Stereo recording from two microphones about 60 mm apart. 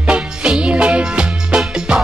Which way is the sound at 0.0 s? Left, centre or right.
Centre.